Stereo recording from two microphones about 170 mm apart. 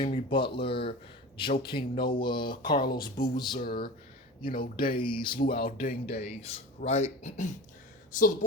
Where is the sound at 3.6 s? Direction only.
65° left (ahead or behind).